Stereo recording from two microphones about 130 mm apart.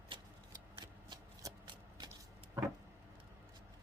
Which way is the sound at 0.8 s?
35° right (ahead or behind).